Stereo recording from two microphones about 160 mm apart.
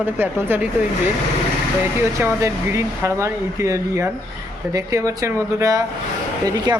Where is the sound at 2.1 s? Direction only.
20° right (ahead or behind).